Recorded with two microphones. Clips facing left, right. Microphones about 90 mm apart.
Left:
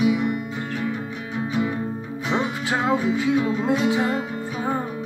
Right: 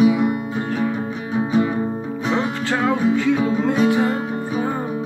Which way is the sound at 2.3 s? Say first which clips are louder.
Right 1 dB; 15° left (ahead or behind).